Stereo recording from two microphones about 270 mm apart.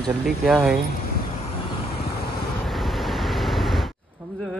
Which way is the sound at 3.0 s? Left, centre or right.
Centre.